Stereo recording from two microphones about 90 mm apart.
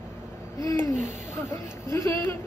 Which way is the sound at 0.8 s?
30° left (ahead or behind).